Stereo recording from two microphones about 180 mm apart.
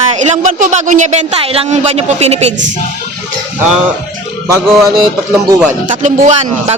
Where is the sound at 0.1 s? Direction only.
40° right (ahead or behind).